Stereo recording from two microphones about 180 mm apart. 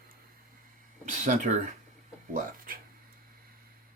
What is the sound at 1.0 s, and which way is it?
Speech, 45° right (ahead or behind).